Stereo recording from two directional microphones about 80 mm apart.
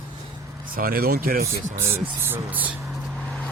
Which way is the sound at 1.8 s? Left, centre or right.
Right.